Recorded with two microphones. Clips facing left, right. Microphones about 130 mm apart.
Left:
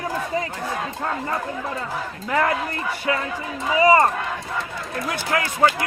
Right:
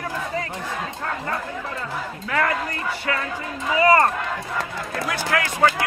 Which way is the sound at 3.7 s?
15° left (ahead or behind).